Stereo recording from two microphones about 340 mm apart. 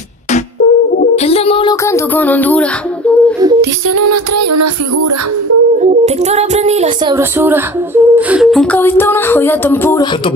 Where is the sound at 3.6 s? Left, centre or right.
Right.